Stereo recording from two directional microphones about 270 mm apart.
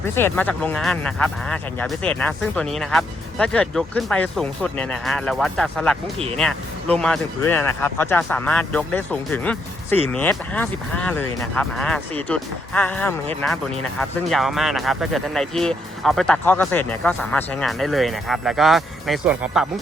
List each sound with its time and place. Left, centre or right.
0.0 s speech: centre
6.1 s speech: right
6.4 s speech: centre